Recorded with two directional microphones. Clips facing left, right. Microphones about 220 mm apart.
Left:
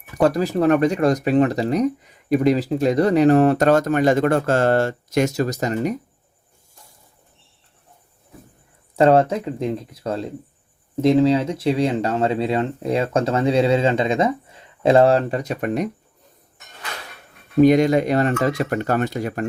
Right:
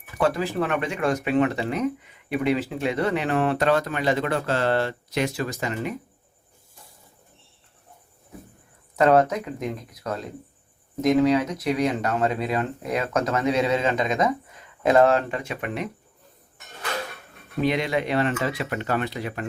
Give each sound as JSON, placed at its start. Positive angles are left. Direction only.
{"t": 0.2, "sound": "speech", "side_deg": 40}
{"t": 9.0, "sound": "speech", "side_deg": 30}
{"t": 17.6, "sound": "speech", "side_deg": 45}